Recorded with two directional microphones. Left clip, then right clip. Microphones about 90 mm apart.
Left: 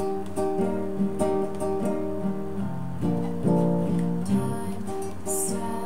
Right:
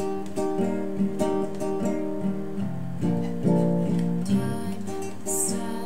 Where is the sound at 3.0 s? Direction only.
15° right (ahead or behind).